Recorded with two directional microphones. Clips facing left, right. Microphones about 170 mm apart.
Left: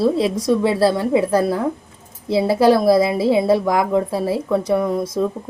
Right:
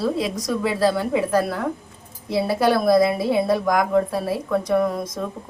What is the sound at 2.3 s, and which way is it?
Speech, 30° left (ahead or behind).